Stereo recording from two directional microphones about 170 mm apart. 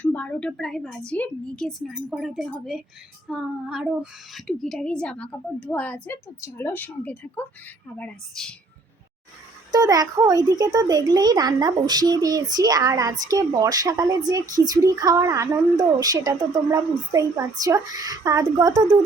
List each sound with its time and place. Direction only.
0.0 s speech: 10° left (ahead or behind)
9.7 s a child's voice: 20° right (ahead or behind)